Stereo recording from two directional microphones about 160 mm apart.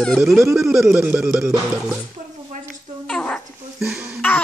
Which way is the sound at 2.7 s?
5° left (ahead or behind).